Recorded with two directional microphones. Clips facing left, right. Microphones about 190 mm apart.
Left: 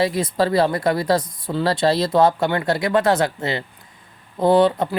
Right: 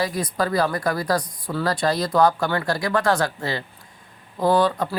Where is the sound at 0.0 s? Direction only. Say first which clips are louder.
Left 4 dB; 25° left (ahead or behind).